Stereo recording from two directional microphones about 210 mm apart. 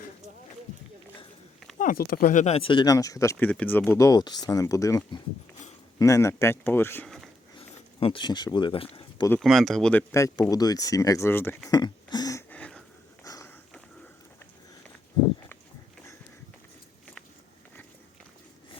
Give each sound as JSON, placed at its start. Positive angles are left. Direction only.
{"t": 1.8, "sound": "speech", "side_deg": 45}
{"t": 7.9, "sound": "speech", "side_deg": 25}
{"t": 9.4, "sound": "speech", "side_deg": 0}
{"t": 11.7, "sound": "a sound", "side_deg": 20}
{"t": 13.2, "sound": "dog", "side_deg": 15}